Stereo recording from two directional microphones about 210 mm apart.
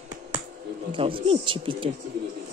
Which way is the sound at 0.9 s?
25° right (ahead or behind).